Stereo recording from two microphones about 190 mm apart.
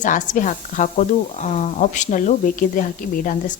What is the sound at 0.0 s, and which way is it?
Speech, 40° left (ahead or behind).